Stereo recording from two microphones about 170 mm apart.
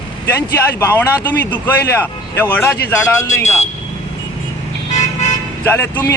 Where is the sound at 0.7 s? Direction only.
15° left (ahead or behind).